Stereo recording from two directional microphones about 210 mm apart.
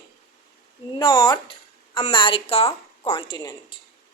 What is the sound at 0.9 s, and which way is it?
A woman's voice, 20° left (ahead or behind).